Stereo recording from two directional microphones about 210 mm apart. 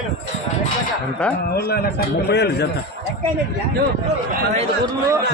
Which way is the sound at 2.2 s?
50° left (ahead or behind).